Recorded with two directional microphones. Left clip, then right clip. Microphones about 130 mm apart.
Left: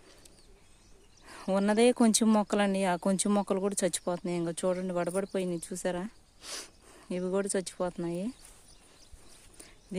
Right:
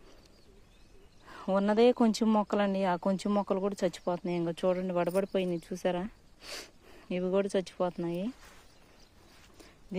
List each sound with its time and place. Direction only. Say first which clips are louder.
1.3 s speech: even; 25° left (ahead or behind)
4.3 s speech: right 1 dB; 10° left (ahead or behind)